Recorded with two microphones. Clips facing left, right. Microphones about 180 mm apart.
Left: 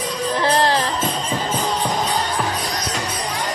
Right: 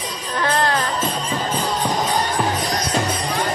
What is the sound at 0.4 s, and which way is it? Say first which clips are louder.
Music: left 1 dB; 30° left (ahead or behind).